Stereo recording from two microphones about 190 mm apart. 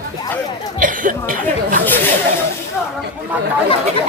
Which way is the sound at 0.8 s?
45° right (ahead or behind).